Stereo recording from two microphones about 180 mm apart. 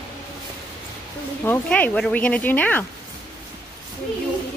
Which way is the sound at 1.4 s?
10° left (ahead or behind).